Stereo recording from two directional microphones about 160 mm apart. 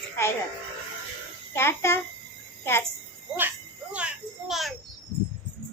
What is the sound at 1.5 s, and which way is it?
Speech, 15° left (ahead or behind).